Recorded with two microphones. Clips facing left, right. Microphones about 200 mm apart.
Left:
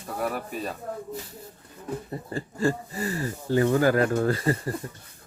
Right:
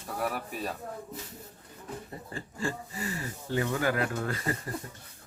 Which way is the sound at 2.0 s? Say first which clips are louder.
Left 8 dB; 40° left (ahead or behind).